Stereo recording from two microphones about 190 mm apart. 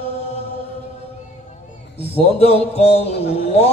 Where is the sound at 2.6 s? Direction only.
35° left (ahead or behind).